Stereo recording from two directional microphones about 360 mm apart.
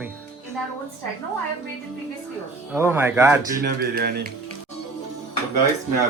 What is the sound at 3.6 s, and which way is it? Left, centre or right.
Speech, right.